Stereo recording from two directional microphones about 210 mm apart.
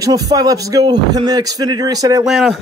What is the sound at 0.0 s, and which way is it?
A man's voice, 15° right (ahead or behind).